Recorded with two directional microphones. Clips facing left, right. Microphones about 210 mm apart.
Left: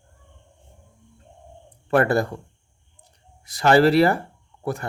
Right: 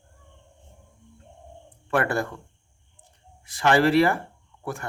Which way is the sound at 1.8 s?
35° left (ahead or behind).